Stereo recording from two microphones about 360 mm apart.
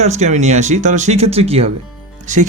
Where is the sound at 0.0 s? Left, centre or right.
Centre.